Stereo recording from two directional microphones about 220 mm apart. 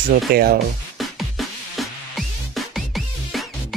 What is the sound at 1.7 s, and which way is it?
Music, centre (ahead or behind).